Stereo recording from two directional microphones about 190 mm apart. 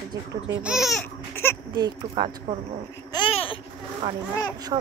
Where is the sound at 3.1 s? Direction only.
25° left (ahead or behind).